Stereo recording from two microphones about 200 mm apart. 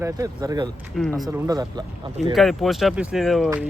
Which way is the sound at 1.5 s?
20° right (ahead or behind).